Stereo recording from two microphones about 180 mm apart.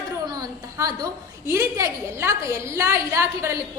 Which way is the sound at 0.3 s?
20° right (ahead or behind).